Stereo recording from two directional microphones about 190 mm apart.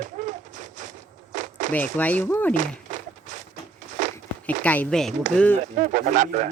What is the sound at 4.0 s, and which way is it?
Walk, 40° right (ahead or behind).